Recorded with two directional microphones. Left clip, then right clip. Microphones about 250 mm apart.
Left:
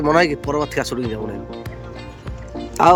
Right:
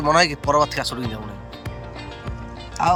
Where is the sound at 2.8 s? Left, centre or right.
Centre.